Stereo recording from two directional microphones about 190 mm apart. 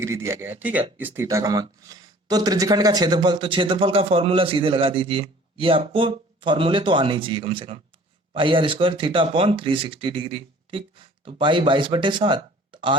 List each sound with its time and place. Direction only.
0.0 s speech: 15° right (ahead or behind)